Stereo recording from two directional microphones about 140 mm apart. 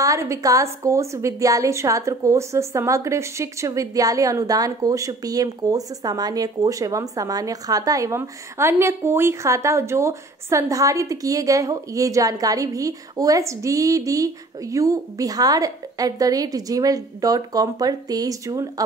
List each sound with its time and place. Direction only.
0.0 s a woman's voice: 20° right (ahead or behind)